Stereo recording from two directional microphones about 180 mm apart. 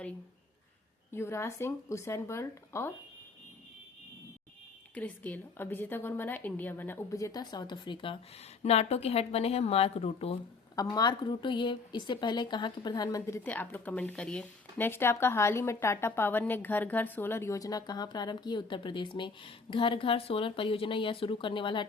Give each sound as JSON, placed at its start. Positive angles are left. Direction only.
{"t": 1.1, "sound": "speech", "side_deg": 15}
{"t": 4.9, "sound": "a woman's voice", "side_deg": 10}
{"t": 10.8, "sound": "a woman's voice", "side_deg": 20}